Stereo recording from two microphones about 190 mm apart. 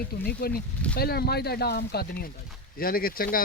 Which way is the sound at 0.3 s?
55° left (ahead or behind).